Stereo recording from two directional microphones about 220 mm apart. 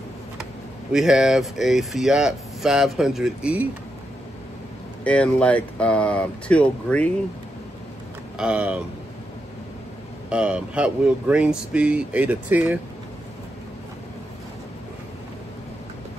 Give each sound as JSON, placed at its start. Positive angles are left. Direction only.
{"t": 0.9, "sound": "speech", "side_deg": 0}
{"t": 5.0, "sound": "speech", "side_deg": 5}
{"t": 8.4, "sound": "speech", "side_deg": -5}
{"t": 10.3, "sound": "speech", "side_deg": -5}